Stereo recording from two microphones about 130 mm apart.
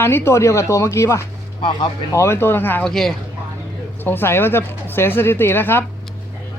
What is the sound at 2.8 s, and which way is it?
Speech, 5° left (ahead or behind).